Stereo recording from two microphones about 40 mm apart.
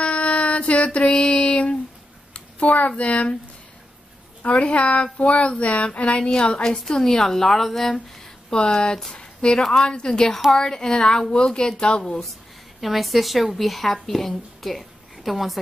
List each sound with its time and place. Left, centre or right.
0.0 s child singing: left
2.3 s a sound: left
3.0 s speech: left
4.4 s a woman's voice: left; by 8.0 s centre
8.7 s a woman's voice: left
12.8 s a woman's voice: centre